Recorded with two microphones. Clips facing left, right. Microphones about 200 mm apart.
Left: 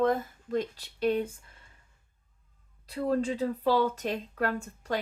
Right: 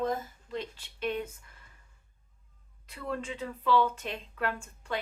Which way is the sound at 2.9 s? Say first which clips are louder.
Left 8 dB; 35° left (ahead or behind).